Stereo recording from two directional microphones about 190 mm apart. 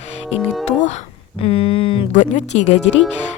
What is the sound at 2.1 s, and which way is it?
Speech, 40° left (ahead or behind).